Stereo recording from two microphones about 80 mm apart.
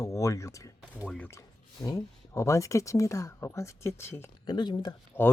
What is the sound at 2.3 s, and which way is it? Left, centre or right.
Speech, left.